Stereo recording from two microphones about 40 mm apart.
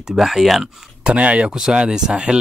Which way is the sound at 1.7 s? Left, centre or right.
Centre.